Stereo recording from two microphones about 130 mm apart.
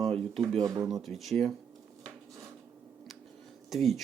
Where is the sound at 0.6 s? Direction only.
25° right (ahead or behind).